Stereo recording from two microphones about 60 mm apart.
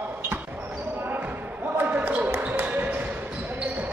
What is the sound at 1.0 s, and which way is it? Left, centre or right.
Basketball bounce, right.